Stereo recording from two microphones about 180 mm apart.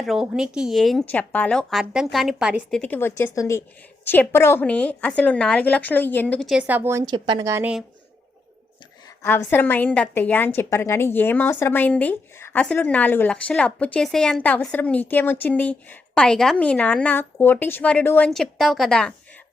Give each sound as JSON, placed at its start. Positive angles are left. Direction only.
{"t": 0.0, "sound": "a woman's voice", "side_deg": 0}
{"t": 9.2, "sound": "a woman's voice", "side_deg": 10}